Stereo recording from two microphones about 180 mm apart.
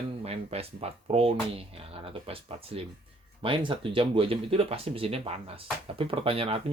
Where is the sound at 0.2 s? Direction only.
35° right (ahead or behind).